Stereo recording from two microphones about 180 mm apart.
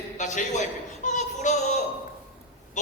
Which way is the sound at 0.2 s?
40° left (ahead or behind).